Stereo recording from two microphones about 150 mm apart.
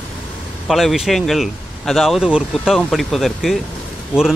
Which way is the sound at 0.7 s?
Centre (ahead or behind).